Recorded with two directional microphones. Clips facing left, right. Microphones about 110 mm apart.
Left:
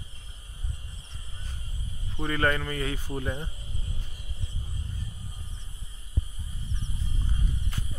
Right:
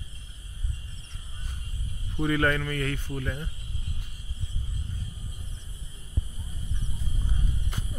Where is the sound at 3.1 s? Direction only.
25° left (ahead or behind).